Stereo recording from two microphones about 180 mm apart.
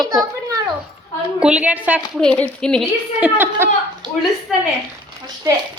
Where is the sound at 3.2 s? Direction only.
10° right (ahead or behind).